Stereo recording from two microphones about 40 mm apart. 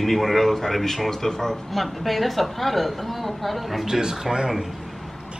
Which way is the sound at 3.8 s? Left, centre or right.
Centre.